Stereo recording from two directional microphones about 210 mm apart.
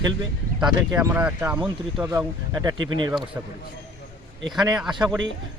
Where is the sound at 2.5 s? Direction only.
15° right (ahead or behind).